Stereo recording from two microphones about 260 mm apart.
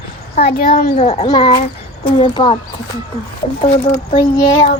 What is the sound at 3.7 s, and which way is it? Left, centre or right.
Speech, left.